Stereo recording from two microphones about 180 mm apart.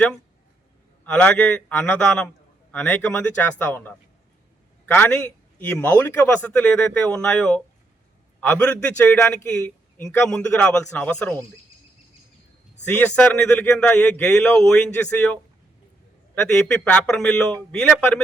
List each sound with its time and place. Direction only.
1.0 s a man's voice: 5° left (ahead or behind)
12.8 s a man's voice: 10° left (ahead or behind)